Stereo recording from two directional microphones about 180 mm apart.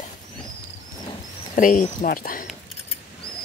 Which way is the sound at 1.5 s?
50° left (ahead or behind).